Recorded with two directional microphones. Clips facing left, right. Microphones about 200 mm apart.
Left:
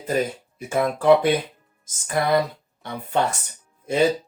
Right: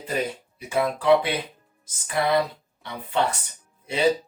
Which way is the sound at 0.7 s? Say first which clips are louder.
Left 3 dB; 45° left (ahead or behind).